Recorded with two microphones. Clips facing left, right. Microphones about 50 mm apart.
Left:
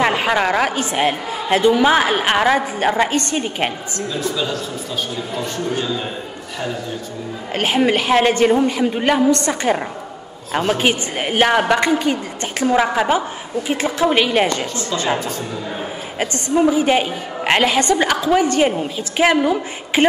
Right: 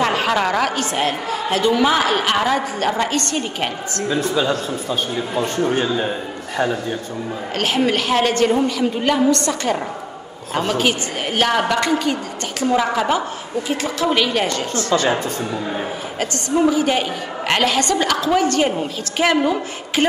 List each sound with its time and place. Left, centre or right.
0.0 s a woman's voice: centre
4.1 s a man's voice: right
7.5 s a woman's voice: centre
16.2 s a woman's voice: left